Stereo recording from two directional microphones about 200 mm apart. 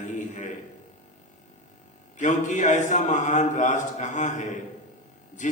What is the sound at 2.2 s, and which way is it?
Mantra, 40° left (ahead or behind).